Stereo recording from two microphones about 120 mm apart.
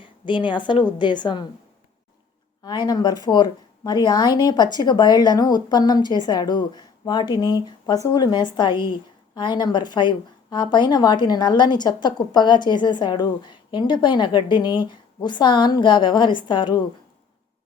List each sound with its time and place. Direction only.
0.0 s speech: 45° left (ahead or behind)
2.6 s speech: 35° left (ahead or behind)